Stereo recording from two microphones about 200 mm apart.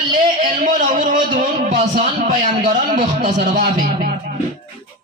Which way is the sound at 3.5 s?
45° right (ahead or behind).